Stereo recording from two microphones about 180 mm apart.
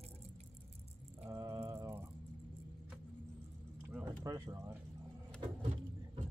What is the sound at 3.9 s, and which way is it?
Speech, 15° right (ahead or behind).